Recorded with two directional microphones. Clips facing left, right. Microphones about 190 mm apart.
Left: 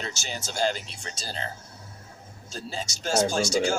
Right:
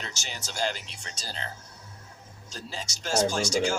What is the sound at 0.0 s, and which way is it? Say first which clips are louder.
Speech: left 5 dB; 30° left (ahead or behind).